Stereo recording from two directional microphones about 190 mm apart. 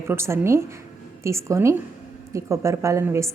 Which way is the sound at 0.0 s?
15° right (ahead or behind).